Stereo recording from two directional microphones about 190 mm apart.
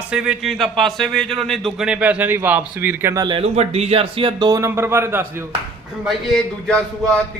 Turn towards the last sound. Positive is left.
turn(degrees=5)  # may be behind; listen again after turning